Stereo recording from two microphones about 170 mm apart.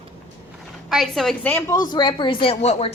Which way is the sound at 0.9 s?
Centre (ahead or behind).